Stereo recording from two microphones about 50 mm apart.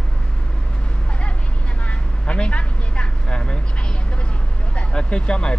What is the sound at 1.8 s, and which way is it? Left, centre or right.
Vehicle, left.